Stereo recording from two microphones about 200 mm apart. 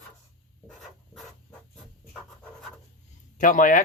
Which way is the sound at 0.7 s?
Centre (ahead or behind).